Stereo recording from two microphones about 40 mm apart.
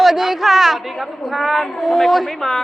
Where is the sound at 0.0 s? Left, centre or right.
Centre.